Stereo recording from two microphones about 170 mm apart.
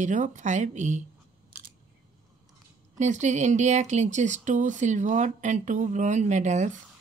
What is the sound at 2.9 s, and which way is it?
Speech, 45° right (ahead or behind).